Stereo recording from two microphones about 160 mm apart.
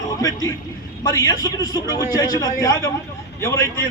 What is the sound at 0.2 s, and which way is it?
A man's voice, 20° left (ahead or behind).